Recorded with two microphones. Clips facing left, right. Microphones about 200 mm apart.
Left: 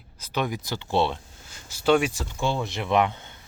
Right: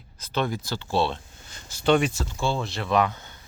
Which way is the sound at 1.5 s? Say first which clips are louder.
Even; 5° left (ahead or behind).